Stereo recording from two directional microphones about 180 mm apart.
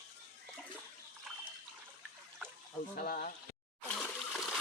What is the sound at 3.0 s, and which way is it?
Speech, 55° left (ahead or behind).